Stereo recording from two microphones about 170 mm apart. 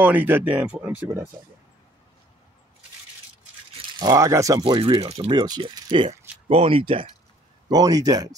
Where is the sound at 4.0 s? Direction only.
20° right (ahead or behind).